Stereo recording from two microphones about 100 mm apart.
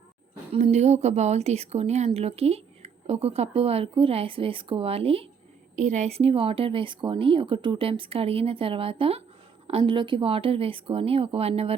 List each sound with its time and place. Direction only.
0.5 s speech: 90° right; by 5.3 s 75° right (ahead or behind)
6.1 s speech: 85° right